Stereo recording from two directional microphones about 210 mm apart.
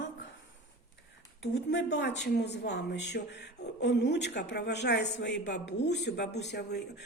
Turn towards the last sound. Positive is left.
turn(degrees=50)  # may be behind; listen again after turning